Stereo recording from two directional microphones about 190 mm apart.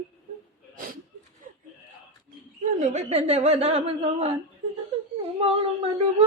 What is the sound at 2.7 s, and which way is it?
Speech, 40° right (ahead or behind).